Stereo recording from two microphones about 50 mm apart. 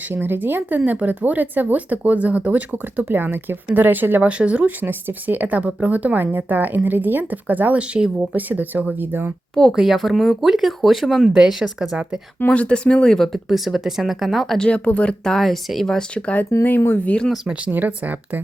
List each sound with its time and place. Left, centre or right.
0.1 s speech: right
4.3 s speech: right
4.9 s speech: right
8.3 s speech: right
9.7 s speech: centre
11.3 s speech: centre
12.4 s speech: left
13.1 s speech: centre
16.1 s speech: left
16.6 s speech: left
17.7 s speech: right